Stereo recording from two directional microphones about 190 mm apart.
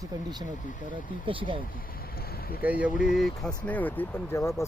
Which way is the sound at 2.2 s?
55° left (ahead or behind).